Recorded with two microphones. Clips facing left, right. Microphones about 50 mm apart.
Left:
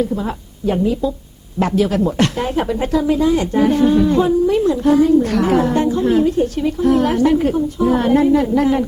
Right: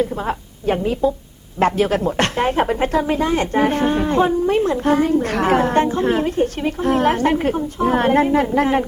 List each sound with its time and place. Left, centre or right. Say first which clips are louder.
0.0 s speech: left 1 dB; right